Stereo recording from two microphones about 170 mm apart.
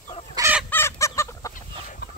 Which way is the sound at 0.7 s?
15° left (ahead or behind).